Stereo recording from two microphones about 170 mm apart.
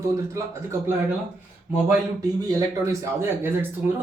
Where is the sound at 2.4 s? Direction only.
20° right (ahead or behind).